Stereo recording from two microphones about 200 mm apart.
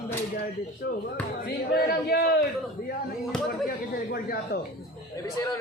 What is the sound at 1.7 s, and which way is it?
Speech, 50° left (ahead or behind).